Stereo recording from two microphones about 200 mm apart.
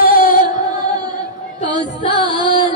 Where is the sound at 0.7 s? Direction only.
20° right (ahead or behind).